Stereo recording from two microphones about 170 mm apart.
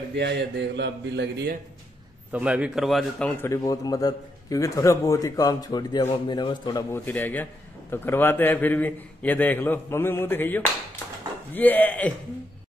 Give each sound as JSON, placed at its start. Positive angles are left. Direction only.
{"t": 0.1, "sound": "a man's voice", "side_deg": -90}
{"t": 2.3, "sound": "a man's voice", "side_deg": -5}
{"t": 6.9, "sound": "a man's voice", "side_deg": 10}